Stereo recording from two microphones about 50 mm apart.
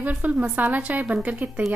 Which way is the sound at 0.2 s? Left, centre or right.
Right.